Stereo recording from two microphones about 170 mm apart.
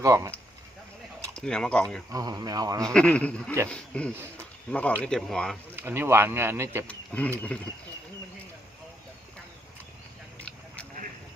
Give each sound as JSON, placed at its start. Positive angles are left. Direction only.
{"t": 0.0, "sound": "a man's voice", "side_deg": -20}
{"t": 1.4, "sound": "speech", "side_deg": 5}
{"t": 2.1, "sound": "a man's voice", "side_deg": -20}
{"t": 2.9, "sound": "a man's voice", "side_deg": 5}
{"t": 5.7, "sound": "speech", "side_deg": -10}
{"t": 6.8, "sound": "speech", "side_deg": 10}